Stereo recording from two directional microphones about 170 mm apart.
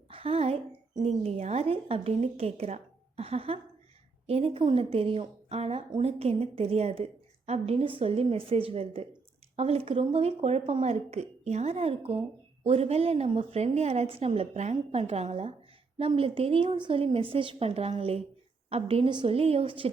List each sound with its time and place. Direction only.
0.1 s a woman's voice: 35° right (ahead or behind)